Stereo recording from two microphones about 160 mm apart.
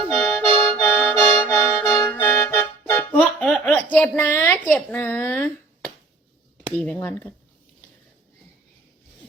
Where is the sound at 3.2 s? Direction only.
Centre (ahead or behind).